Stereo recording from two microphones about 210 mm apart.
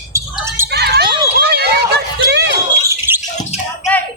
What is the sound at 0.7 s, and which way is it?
Basketball bounce, 50° right (ahead or behind).